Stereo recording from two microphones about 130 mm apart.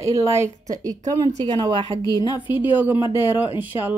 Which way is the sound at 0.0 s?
25° right (ahead or behind).